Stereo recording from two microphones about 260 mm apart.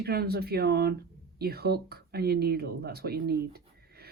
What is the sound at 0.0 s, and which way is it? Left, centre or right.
Speech, right.